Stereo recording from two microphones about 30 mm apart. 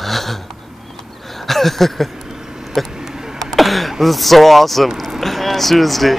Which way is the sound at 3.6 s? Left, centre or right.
Centre.